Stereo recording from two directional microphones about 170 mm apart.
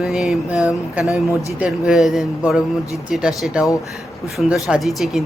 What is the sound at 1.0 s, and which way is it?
Speech, 20° left (ahead or behind).